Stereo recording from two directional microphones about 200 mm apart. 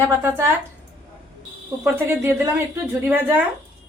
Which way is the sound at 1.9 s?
10° right (ahead or behind).